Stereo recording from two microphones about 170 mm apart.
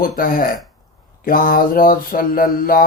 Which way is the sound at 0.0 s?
55° left (ahead or behind).